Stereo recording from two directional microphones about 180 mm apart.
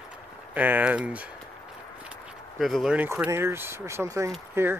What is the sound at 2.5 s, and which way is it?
Speech, centre (ahead or behind).